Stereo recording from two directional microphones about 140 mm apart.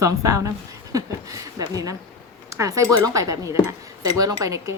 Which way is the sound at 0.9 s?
25° right (ahead or behind).